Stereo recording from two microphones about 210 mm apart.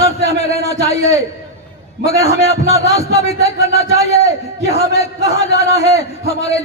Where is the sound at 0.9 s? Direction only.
30° left (ahead or behind).